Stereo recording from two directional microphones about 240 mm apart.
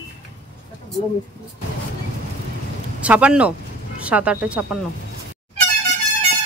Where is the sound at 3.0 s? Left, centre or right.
Centre.